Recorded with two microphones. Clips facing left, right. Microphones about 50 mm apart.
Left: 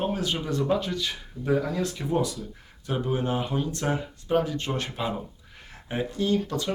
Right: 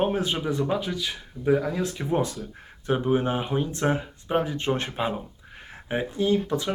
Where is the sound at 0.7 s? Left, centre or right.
Centre; by 4.9 s right.